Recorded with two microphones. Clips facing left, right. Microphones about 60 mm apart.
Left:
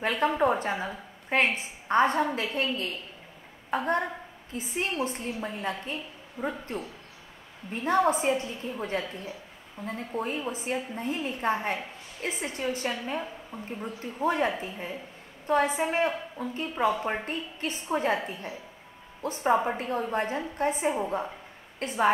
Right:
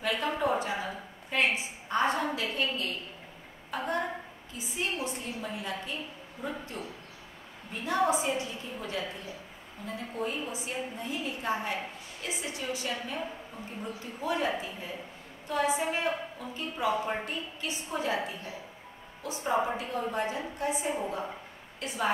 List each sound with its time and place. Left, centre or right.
0.2 s a sound: left
2.3 s a woman's voice: left
7.8 s a woman's voice: left
14.2 s a woman's voice: left